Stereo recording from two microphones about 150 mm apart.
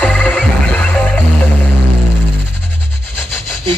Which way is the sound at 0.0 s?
10° left (ahead or behind).